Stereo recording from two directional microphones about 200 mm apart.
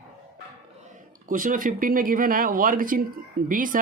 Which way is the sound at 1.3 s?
40° right (ahead or behind).